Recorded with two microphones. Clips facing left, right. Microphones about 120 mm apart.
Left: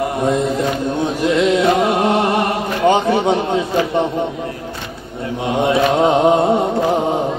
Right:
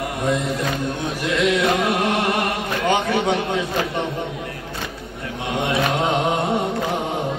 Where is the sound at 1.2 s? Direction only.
25° left (ahead or behind).